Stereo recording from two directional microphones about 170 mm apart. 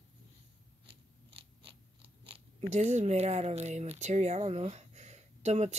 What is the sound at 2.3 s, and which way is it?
Speech, 40° right (ahead or behind).